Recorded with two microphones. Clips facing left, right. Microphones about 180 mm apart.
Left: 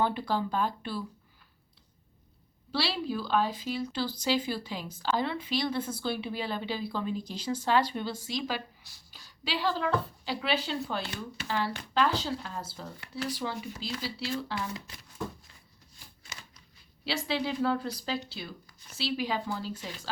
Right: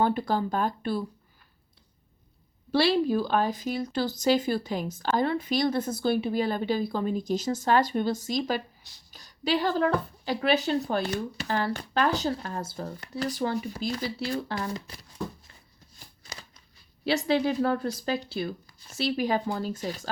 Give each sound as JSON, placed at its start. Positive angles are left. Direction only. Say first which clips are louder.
{"t": 0.0, "sound": "a woman's voice", "louder": "right 4 dB", "side_deg": -45}
{"t": 2.7, "sound": "a woman's voice", "louder": "right 9 dB", "side_deg": -50}
{"t": 16.2, "sound": "a sound", "louder": "right 4 dB", "side_deg": -35}
{"t": 17.0, "sound": "a woman's voice", "louder": "right 7 dB", "side_deg": -50}